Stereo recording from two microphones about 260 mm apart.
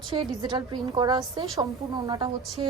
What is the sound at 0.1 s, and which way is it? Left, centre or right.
A woman's voice, centre.